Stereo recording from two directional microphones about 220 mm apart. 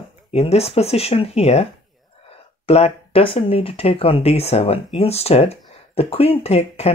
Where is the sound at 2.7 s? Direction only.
25° left (ahead or behind).